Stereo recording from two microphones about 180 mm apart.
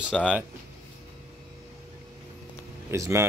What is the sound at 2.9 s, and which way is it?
Speech, 15° right (ahead or behind).